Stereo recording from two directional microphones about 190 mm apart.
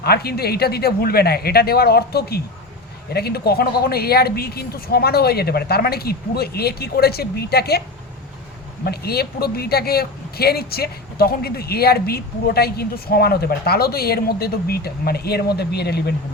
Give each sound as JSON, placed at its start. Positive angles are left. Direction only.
{"t": 0.0, "sound": "speech", "side_deg": 55}
{"t": 8.8, "sound": "speech", "side_deg": 55}